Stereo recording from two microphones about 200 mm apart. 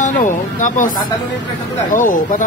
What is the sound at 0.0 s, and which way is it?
Speech, 40° left (ahead or behind).